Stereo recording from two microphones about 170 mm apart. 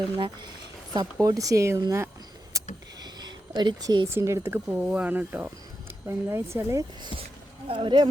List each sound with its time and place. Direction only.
0.9 s speech: 20° right (ahead or behind)
2.5 s a sound: 20° right (ahead or behind)
3.0 s speech: 25° right (ahead or behind)
7.7 s speech: 30° right (ahead or behind)